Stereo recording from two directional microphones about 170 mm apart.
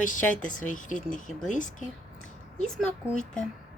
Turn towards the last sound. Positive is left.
turn(degrees=5)  # may be behind; listen again after turning